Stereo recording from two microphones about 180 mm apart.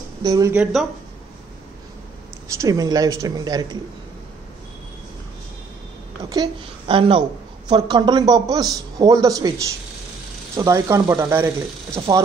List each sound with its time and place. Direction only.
0.2 s a woman's voice: 20° right (ahead or behind)
2.4 s a woman's voice: 15° right (ahead or behind)
6.2 s a woman's voice: 20° right (ahead or behind)
10.5 s speech: 15° right (ahead or behind)